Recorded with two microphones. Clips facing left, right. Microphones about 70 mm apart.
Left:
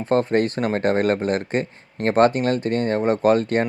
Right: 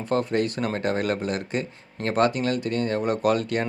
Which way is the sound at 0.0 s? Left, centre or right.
Left.